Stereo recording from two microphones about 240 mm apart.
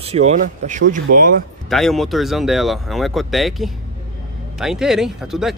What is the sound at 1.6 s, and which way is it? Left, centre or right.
A man's voice, centre.